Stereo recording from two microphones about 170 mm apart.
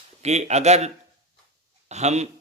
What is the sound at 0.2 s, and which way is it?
Speech, 40° right (ahead or behind).